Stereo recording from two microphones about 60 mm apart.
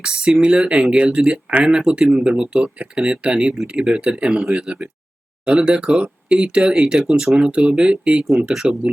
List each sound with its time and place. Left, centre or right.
0.0 s speech: centre